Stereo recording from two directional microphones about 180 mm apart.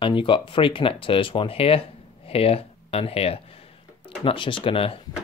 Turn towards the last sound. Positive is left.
turn(degrees=30)  # may be behind; listen again after turning